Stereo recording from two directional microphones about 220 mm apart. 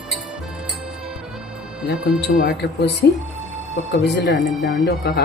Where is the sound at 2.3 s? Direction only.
50° left (ahead or behind).